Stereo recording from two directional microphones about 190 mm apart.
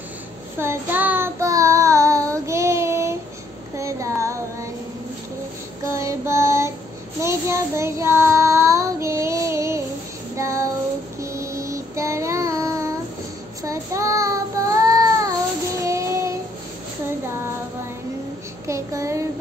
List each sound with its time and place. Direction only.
0.6 s child singing: 10° right (ahead or behind)
5.9 s child singing: 15° right (ahead or behind)
18.7 s child singing: 15° right (ahead or behind)